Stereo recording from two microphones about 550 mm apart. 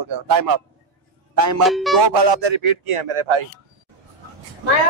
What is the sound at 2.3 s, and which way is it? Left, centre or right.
A man's voice, right.